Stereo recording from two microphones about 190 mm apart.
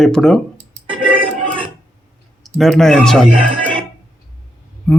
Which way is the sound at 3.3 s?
40° right (ahead or behind).